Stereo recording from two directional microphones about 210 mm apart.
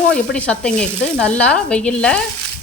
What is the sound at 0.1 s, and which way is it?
A woman's voice, 5° left (ahead or behind).